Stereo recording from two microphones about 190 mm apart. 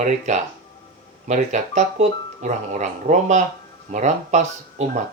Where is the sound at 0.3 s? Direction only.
40° right (ahead or behind).